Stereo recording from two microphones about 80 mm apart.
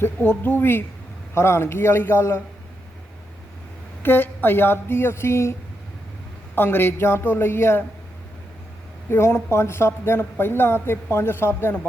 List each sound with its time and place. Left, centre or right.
0.0 s speech: left
4.0 s speech: left
6.6 s speech: left
9.0 s speech: left